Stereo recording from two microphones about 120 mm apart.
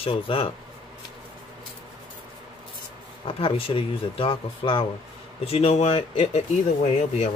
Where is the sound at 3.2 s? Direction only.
50° left (ahead or behind).